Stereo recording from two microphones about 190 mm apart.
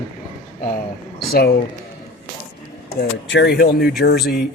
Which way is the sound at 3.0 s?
60° left (ahead or behind).